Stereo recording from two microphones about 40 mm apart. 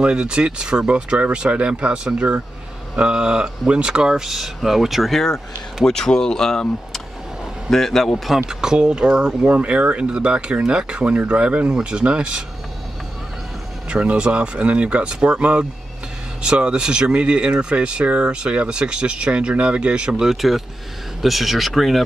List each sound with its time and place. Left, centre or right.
0.0 s speech: right
3.0 s speech: right; by 5.1 s centre
5.1 s speech: centre
8.5 s speech: centre
14.0 s speech: right
20.1 s speech: centre